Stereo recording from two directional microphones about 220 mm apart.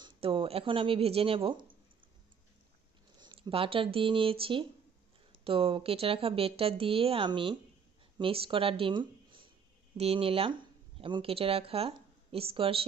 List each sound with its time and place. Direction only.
0.0 s speech: 25° right (ahead or behind)
3.2 s speech: 20° right (ahead or behind)